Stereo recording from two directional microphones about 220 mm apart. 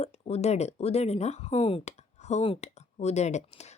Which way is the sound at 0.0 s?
30° left (ahead or behind).